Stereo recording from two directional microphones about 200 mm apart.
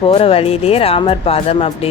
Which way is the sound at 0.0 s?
30° left (ahead or behind).